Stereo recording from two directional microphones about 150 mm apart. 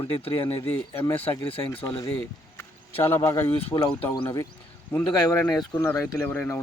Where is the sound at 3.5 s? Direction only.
40° left (ahead or behind).